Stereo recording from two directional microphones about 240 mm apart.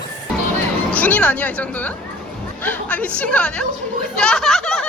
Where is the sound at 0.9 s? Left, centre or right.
Centre.